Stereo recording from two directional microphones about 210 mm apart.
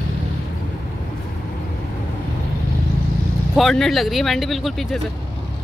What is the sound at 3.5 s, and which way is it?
Speech, centre (ahead or behind).